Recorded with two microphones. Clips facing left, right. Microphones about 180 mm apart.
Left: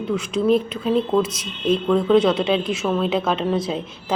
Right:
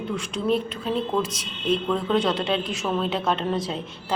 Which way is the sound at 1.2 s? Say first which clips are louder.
Left 5 dB; 35° right (ahead or behind).